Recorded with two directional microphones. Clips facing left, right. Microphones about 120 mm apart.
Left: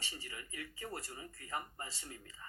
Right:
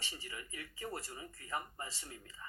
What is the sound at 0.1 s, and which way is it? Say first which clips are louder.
Speech: right 1 dB; 25° right (ahead or behind).